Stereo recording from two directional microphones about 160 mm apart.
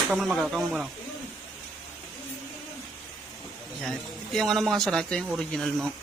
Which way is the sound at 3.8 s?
Centre (ahead or behind).